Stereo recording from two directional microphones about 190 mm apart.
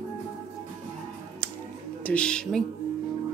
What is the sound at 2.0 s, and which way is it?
Speech, 5° left (ahead or behind).